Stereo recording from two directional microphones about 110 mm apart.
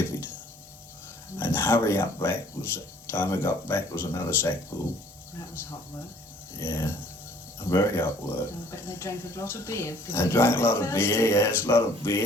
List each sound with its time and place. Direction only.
1.4 s speech: 20° left (ahead or behind)
6.6 s speech: 20° left (ahead or behind)